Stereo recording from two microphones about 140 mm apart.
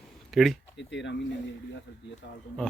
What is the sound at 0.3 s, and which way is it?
Speech, centre (ahead or behind).